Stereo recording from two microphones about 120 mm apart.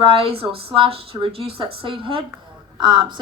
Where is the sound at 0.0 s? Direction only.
50° right (ahead or behind).